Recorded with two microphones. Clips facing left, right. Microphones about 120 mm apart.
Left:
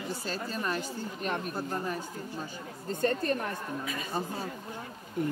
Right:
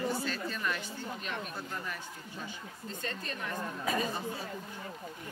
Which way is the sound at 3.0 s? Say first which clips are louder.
Left 12 dB; 45° left (ahead or behind).